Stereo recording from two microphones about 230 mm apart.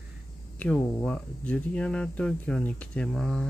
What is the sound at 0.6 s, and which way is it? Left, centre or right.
Speech, centre.